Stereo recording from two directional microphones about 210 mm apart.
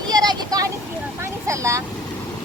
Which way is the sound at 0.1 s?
20° right (ahead or behind).